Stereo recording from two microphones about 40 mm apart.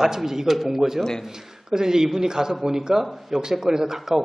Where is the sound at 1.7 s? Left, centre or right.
Centre.